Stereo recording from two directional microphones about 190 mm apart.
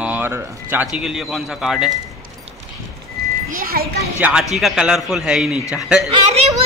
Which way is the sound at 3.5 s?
50° right (ahead or behind).